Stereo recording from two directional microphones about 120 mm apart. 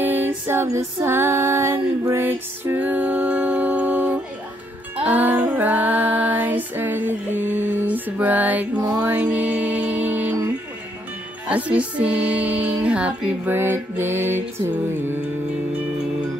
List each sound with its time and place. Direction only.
0.0 s music: 15° right (ahead or behind)
5.0 s female singing: 15° right (ahead or behind)
7.4 s mantra: 15° right (ahead or behind)
8.7 s music: 30° right (ahead or behind)
9.0 s music: 10° right (ahead or behind)
11.4 s music: 10° right (ahead or behind)